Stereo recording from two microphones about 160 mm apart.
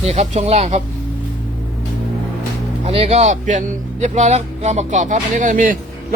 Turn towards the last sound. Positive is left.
turn(degrees=-55)  # may be behind; listen again after turning